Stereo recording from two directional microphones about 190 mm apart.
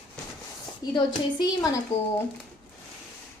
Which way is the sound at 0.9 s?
20° left (ahead or behind).